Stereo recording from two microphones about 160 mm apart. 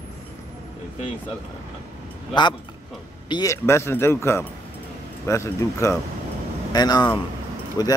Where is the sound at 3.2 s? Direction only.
25° left (ahead or behind).